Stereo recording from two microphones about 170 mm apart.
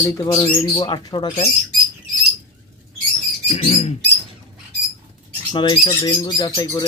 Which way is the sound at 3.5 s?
35° left (ahead or behind).